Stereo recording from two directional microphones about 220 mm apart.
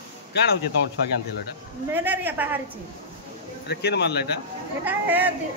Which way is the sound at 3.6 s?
50° left (ahead or behind).